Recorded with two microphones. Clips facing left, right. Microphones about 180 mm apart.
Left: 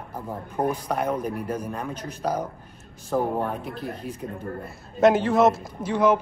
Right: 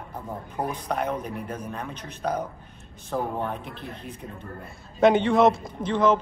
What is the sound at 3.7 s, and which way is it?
Speech, 35° left (ahead or behind).